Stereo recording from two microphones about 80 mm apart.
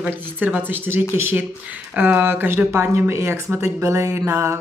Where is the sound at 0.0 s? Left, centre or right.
Right.